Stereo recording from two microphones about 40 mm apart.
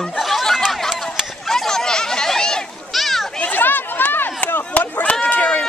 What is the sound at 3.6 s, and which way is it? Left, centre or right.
Run, left.